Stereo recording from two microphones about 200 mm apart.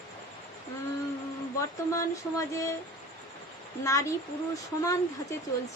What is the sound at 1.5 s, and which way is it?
Speech, 15° left (ahead or behind).